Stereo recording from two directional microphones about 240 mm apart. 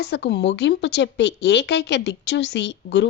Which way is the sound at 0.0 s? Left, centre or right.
Left.